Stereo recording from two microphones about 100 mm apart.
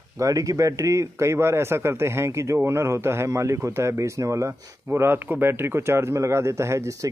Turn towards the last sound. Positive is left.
turn(degrees=-30)  # may be behind; listen again after turning